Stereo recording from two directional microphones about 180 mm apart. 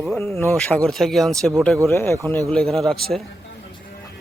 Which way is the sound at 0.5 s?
5° left (ahead or behind).